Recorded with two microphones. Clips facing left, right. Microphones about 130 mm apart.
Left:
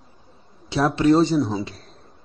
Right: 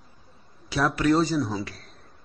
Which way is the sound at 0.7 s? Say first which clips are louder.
Left 4 dB; 25° left (ahead or behind).